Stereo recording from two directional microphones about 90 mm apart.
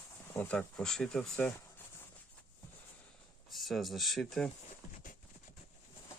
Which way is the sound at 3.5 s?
Centre (ahead or behind).